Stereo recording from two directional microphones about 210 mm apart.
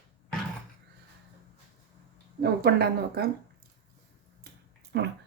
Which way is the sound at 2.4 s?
50° right (ahead or behind).